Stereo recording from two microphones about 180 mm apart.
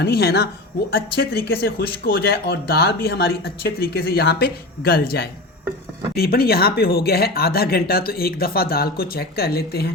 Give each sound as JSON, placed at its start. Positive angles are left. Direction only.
{"t": 0.0, "sound": "speech", "side_deg": 60}